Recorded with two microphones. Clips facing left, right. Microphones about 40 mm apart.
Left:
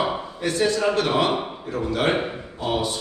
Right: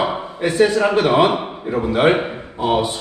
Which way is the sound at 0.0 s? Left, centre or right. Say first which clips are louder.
Right 4 dB; centre.